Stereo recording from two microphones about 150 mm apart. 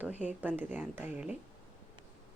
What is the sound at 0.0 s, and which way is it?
Speech, 10° right (ahead or behind).